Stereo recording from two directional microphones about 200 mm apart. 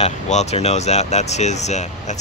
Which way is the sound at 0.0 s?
35° left (ahead or behind).